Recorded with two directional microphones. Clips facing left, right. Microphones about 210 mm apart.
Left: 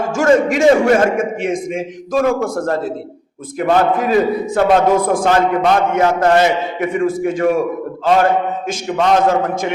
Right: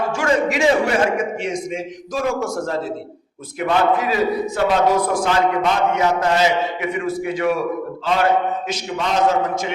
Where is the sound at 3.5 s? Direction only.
45° left (ahead or behind).